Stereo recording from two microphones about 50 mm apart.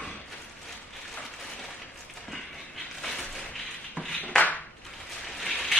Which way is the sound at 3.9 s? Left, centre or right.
Centre.